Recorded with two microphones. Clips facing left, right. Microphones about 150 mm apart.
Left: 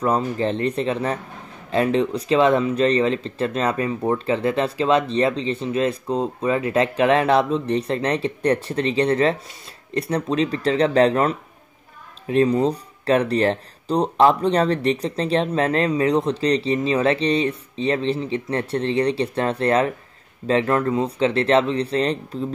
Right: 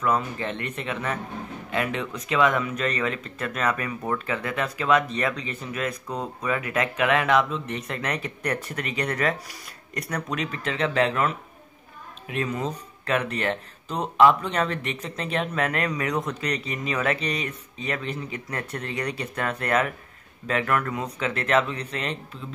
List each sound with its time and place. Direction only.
0.0 s speech: 35° left (ahead or behind)